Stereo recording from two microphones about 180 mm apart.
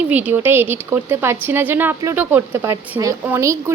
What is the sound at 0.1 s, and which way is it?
A woman's voice, 10° right (ahead or behind).